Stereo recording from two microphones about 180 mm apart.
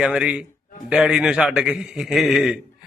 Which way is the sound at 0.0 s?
5° right (ahead or behind).